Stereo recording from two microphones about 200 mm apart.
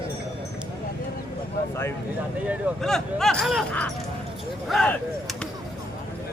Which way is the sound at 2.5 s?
Centre (ahead or behind).